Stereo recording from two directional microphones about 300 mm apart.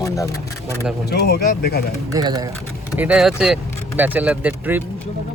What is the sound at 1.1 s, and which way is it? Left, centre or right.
Speech, left.